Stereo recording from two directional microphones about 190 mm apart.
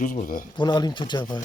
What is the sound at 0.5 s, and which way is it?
Speech, 20° left (ahead or behind).